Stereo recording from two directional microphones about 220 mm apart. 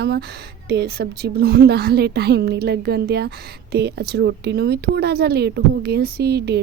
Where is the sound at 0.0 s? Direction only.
45° right (ahead or behind).